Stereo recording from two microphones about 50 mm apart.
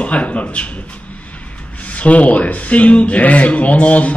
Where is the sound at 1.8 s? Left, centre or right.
Left.